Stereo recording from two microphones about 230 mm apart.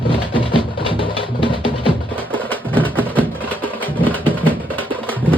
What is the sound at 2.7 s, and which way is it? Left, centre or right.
Music, centre.